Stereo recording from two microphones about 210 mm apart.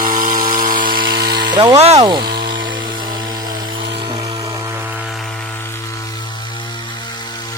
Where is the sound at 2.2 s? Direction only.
45° right (ahead or behind).